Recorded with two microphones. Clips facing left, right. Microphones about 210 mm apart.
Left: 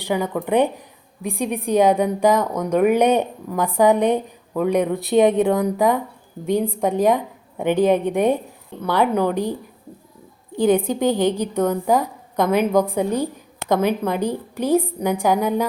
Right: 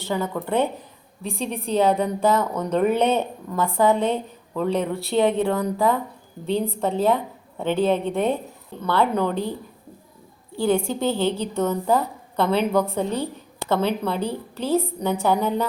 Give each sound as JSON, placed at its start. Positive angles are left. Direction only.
{"t": 0.0, "sound": "a woman's voice", "side_deg": 15}